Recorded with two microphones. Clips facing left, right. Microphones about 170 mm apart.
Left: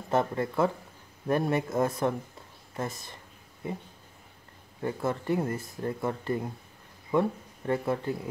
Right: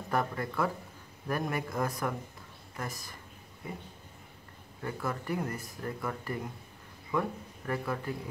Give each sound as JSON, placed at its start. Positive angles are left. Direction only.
{"t": 0.1, "sound": "speech", "side_deg": 25}
{"t": 4.8, "sound": "speech", "side_deg": 25}